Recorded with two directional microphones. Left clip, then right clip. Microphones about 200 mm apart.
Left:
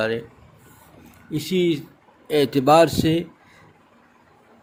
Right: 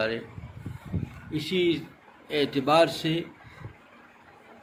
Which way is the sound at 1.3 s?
60° left (ahead or behind).